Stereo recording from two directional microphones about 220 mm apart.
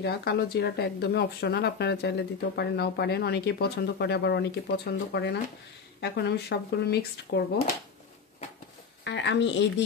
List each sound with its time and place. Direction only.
0.0 s speech: 45° left (ahead or behind)
9.0 s speech: 55° left (ahead or behind)